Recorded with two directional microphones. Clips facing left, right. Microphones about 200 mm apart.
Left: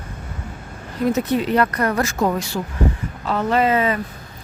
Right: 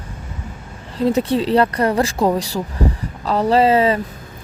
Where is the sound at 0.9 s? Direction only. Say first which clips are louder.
Right 2 dB; 30° right (ahead or behind).